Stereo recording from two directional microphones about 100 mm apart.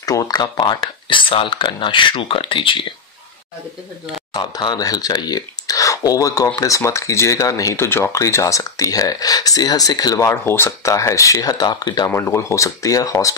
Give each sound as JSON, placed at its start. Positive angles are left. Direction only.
{"t": 0.0, "sound": "speech", "side_deg": 40}
{"t": 4.3, "sound": "speech", "side_deg": 45}
{"t": 12.1, "sound": "speech", "side_deg": 30}